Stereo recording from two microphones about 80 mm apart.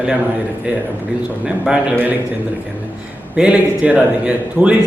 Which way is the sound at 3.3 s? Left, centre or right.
Centre.